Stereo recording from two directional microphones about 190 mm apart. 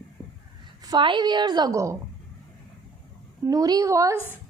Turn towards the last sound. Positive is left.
turn(degrees=-15)  # may be behind; listen again after turning